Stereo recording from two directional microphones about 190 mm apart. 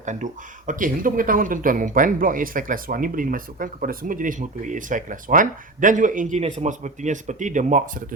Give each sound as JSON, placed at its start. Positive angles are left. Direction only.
{"t": 0.0, "sound": "speech", "side_deg": -40}